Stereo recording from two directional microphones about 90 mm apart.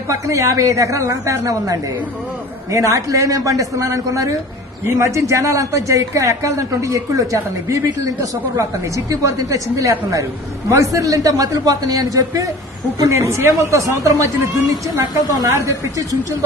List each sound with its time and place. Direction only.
0.1 s a man's voice: 35° right (ahead or behind)